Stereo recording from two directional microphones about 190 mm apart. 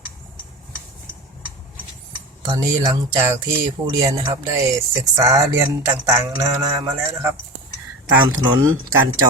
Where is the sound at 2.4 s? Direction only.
20° right (ahead or behind).